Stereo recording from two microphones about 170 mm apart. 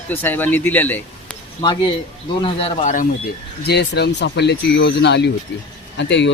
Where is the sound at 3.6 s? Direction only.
75° left (ahead or behind).